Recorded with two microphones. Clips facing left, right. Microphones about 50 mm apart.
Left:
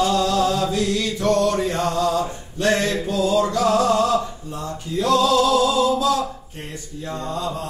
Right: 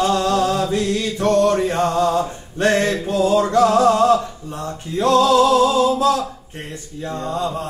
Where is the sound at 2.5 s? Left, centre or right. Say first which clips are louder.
Right 3 dB; right.